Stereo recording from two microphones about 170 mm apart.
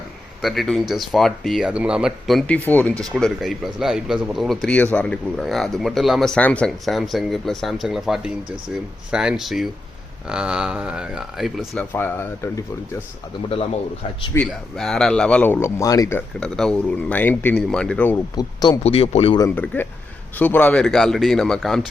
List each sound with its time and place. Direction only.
0.4 s speech: centre (ahead or behind)
2.6 s speech: 10° left (ahead or behind)
11.9 s speech: 10° left (ahead or behind)
14.3 s speech: 5° left (ahead or behind)
16.4 s speech: 5° left (ahead or behind)
18.3 s speech: 25° left (ahead or behind)
18.8 s speech: 35° left (ahead or behind)
19.5 s speech: 10° left (ahead or behind)